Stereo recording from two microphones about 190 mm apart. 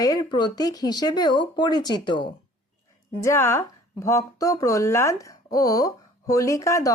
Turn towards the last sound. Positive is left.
turn(degrees=15)  # may be behind; listen again after turning